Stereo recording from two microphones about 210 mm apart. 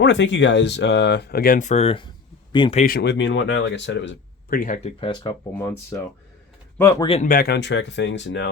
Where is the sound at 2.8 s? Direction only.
50° left (ahead or behind).